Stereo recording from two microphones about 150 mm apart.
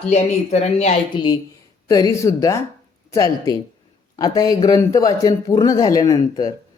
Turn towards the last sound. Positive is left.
turn(degrees=25)  # may be behind; listen again after turning